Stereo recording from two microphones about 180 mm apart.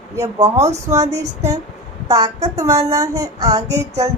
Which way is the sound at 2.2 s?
35° right (ahead or behind).